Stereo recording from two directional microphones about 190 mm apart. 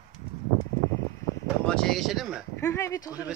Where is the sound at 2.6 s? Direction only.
15° left (ahead or behind).